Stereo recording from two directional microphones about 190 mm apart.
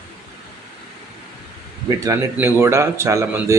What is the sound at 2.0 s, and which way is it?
Speech, 15° right (ahead or behind).